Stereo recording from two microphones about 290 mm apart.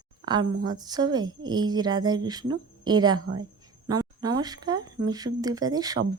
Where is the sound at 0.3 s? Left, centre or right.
Centre.